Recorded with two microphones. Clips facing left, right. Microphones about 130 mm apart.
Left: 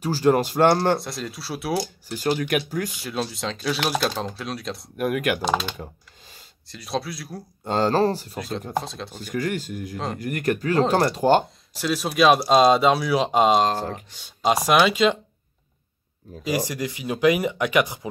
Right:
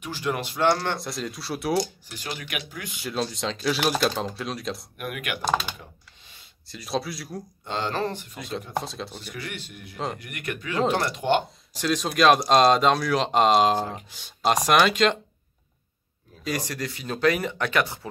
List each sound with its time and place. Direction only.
0.0 s speech: 40° left (ahead or behind)
0.7 s speech: 30° left (ahead or behind)
1.0 s speech: centre (ahead or behind)
2.0 s speech: 40° left (ahead or behind)
3.0 s speech: centre (ahead or behind)
4.9 s speech: 40° left (ahead or behind)
6.7 s speech: centre (ahead or behind)
7.6 s speech: 40° left (ahead or behind)
8.7 s speech: centre (ahead or behind)
9.2 s speech: 45° left (ahead or behind)
11.7 s speech: 5° left (ahead or behind)
16.4 s speech: 10° left (ahead or behind)